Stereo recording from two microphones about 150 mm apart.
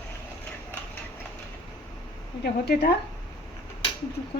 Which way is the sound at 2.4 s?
90° left.